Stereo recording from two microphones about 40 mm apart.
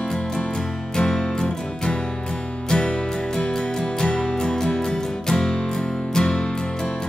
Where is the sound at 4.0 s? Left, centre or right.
Left.